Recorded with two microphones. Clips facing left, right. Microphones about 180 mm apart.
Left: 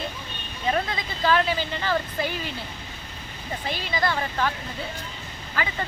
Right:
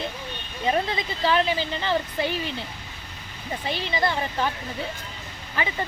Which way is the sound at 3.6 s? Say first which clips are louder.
Right 1 dB; 25° right (ahead or behind).